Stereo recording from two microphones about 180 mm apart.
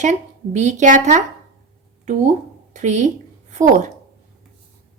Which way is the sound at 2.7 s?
40° right (ahead or behind).